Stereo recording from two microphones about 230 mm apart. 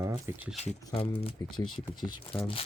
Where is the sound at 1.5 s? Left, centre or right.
Left.